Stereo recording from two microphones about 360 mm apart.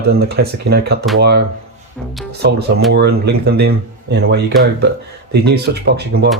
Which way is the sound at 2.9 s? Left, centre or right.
Right.